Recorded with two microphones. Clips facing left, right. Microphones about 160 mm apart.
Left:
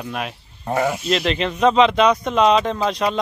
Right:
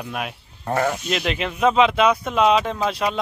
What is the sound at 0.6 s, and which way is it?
Speech, 10° left (ahead or behind).